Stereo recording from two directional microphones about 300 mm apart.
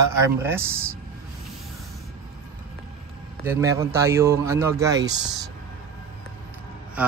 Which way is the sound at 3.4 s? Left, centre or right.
Centre.